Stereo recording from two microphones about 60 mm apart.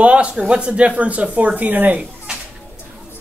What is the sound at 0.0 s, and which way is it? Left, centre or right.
Speech, right.